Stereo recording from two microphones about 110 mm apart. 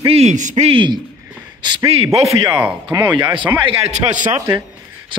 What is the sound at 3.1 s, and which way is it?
Speech, 50° right (ahead or behind).